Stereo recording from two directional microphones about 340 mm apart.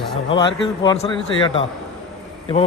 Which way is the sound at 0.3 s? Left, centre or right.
Centre.